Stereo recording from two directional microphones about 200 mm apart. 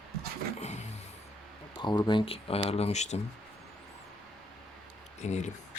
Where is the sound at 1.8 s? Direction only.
20° left (ahead or behind).